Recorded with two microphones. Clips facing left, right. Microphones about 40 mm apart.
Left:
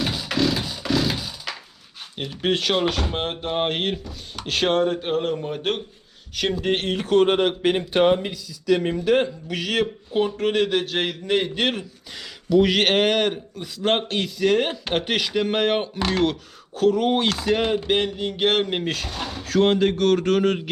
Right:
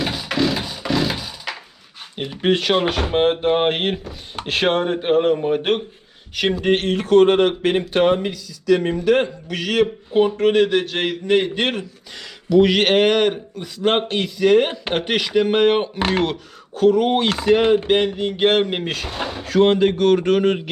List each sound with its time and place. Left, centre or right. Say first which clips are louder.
0.0 s music: right 2 dB; centre
2.1 s speech: right 4 dB; centre
6.6 s a man's voice: right 5 dB; centre
8.8 s a man's voice: right 3 dB; centre
16.0 s speech: right 3 dB; right
16.2 s a man's voice: even; centre